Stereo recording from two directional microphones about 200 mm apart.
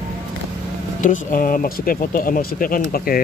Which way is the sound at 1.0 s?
45° left (ahead or behind).